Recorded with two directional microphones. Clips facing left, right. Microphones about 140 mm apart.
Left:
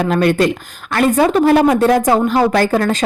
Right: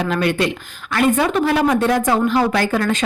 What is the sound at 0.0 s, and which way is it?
Speech, 45° left (ahead or behind).